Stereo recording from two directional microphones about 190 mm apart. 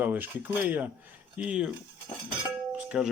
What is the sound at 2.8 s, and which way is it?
Music, 5° right (ahead or behind).